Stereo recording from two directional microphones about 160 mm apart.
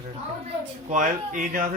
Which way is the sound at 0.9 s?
50° right (ahead or behind).